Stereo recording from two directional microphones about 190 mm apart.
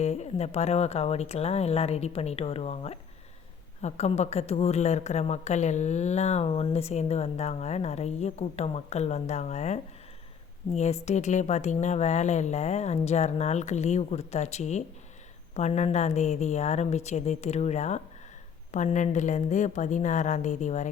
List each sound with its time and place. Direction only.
0.0 s a woman's voice: 35° left (ahead or behind)